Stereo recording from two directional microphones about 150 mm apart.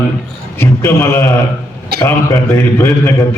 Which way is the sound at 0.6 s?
15° left (ahead or behind).